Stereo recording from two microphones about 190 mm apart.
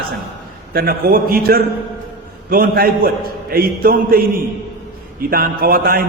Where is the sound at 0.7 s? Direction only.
50° right (ahead or behind).